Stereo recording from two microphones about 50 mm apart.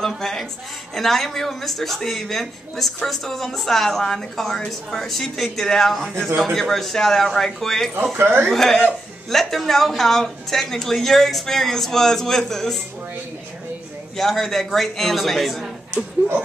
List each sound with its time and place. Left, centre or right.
0.2 s a sound: centre
0.9 s a woman's voice: centre
8.2 s speech: right
8.5 s speech: centre
14.1 s a woman's voice: centre